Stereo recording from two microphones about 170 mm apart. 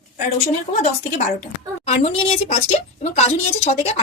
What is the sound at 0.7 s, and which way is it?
A woman's voice, 45° left (ahead or behind).